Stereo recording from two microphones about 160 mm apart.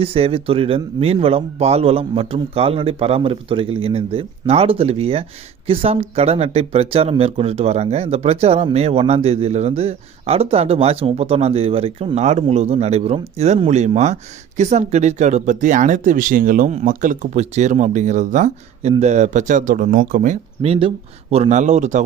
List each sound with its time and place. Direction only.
0.0 s speech: 35° right (ahead or behind); by 20.3 s 55° right (ahead or behind)
20.6 s speech: 40° right (ahead or behind)